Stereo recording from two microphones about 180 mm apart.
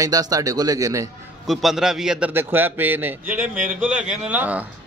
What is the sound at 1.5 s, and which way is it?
Speech, centre (ahead or behind).